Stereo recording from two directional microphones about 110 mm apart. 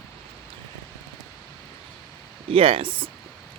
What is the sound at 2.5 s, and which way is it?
Speech, 55° right (ahead or behind).